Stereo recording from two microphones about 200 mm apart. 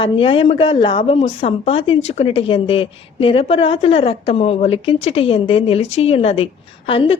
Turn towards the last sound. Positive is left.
turn(degrees=25)  # may be behind; listen again after turning